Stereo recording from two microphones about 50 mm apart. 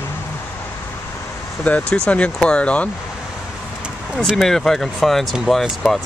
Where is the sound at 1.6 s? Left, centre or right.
Left.